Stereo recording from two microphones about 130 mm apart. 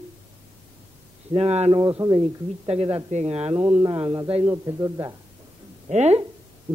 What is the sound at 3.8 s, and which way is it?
Speech, 40° right (ahead or behind).